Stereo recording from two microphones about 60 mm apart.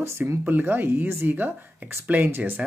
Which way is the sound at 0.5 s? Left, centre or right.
Right.